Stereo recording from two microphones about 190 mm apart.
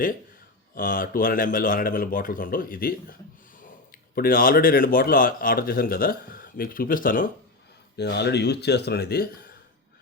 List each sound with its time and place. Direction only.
0.8 s a man's voice: 45° left (ahead or behind)
7.9 s speech: 60° left (ahead or behind)